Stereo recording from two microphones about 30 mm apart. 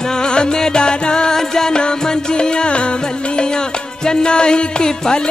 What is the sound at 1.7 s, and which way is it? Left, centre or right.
Music, left.